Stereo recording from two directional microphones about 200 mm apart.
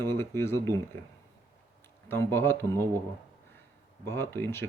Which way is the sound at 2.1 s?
10° left (ahead or behind).